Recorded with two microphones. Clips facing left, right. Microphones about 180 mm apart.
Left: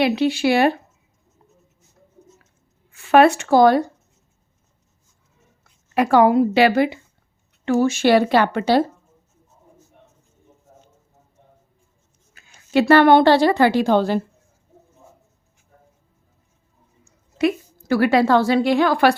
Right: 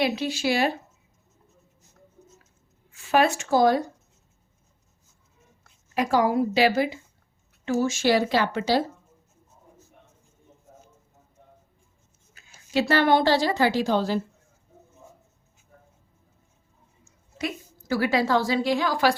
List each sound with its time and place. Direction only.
0.0 s a woman's voice: 65° left (ahead or behind)
2.9 s speech: 65° left (ahead or behind)
5.9 s a woman's voice: 65° left (ahead or behind)
12.4 s a sound: 60° left (ahead or behind)
12.9 s a woman's voice: 65° left (ahead or behind)
17.3 s a woman's voice: 65° left (ahead or behind)